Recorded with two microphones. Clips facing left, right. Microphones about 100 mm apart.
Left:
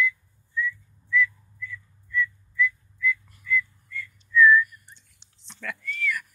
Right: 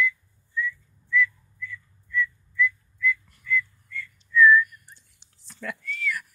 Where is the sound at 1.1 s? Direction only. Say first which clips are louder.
Even; 5° left (ahead or behind).